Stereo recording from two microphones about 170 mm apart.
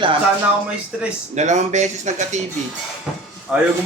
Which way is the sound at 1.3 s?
45° right (ahead or behind).